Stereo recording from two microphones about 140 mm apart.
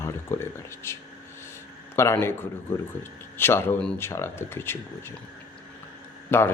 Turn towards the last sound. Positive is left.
turn(degrees=15)  # may be behind; listen again after turning